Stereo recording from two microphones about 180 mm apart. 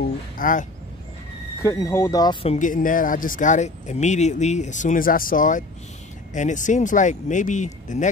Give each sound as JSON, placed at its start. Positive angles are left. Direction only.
{"t": 0.4, "sound": "speech", "side_deg": 45}
{"t": 1.6, "sound": "speech", "side_deg": 15}
{"t": 2.4, "sound": "speech", "side_deg": 40}